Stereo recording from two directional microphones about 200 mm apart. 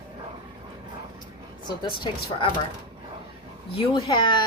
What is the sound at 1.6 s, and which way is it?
Speech, 25° left (ahead or behind).